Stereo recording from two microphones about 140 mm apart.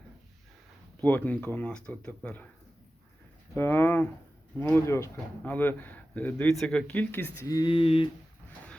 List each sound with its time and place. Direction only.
1.0 s speech: 10° left (ahead or behind)
3.5 s speech: 15° left (ahead or behind)
7.7 s a sound: 40° left (ahead or behind)